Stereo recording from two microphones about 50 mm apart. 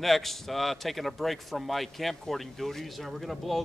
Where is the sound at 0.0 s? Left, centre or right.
Centre.